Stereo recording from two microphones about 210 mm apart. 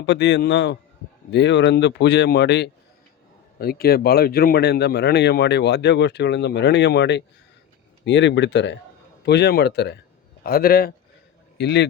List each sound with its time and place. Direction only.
0.0 s speech: 55° left (ahead or behind)